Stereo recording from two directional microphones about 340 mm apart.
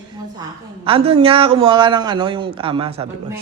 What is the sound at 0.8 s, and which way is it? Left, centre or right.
A man's voice, centre.